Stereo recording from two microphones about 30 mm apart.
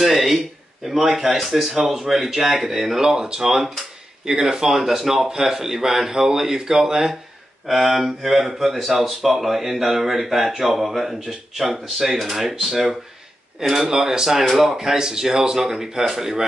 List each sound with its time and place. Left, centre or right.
0.0 s a sound: centre
0.8 s speech: centre
4.3 s speech: right
4.6 s speech: centre